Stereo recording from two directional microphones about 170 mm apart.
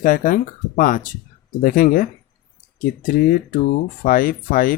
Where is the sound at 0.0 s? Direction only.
50° left (ahead or behind).